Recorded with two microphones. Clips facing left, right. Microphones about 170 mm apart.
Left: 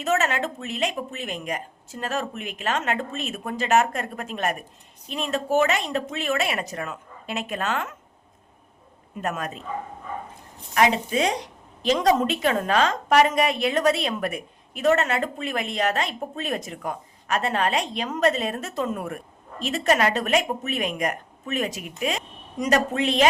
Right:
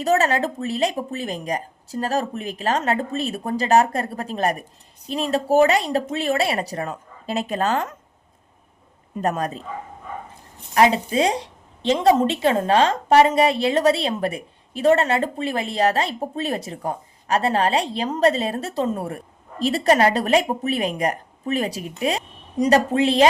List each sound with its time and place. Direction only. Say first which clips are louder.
0.0 s a woman's voice: right 4 dB; 35° right (ahead or behind)
9.2 s a woman's voice: right 6 dB; 35° right (ahead or behind)
10.8 s a woman's voice: right 4 dB; 35° right (ahead or behind)